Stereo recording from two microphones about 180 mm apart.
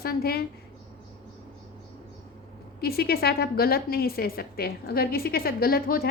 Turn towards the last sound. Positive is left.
turn(degrees=55)  # may be behind; listen again after turning